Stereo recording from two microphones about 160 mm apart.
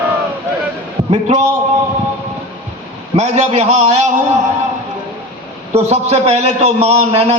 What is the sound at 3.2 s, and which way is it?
Speech, 45° right (ahead or behind).